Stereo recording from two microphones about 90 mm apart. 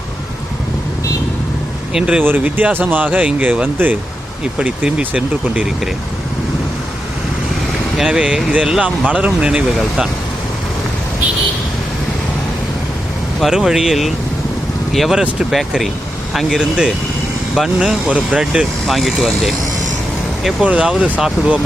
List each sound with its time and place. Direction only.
1.9 s speech: 10° right (ahead or behind)
2.2 s speech: 20° right (ahead or behind)
7.9 s speech: 5° right (ahead or behind)
13.4 s speech: 5° right (ahead or behind)
20.7 s speech: 10° right (ahead or behind)